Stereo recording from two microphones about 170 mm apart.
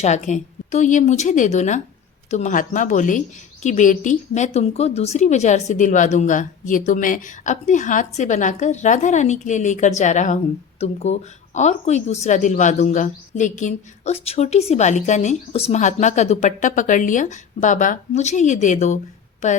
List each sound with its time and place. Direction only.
0.0 s speech: 45° left (ahead or behind)